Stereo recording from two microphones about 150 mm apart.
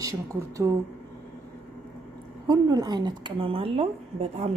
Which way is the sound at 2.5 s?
25° right (ahead or behind).